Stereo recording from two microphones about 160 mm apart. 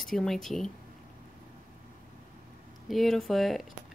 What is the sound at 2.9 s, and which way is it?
Speech, centre (ahead or behind).